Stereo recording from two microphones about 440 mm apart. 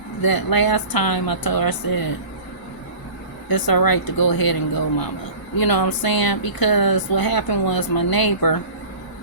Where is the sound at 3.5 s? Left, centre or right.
Left.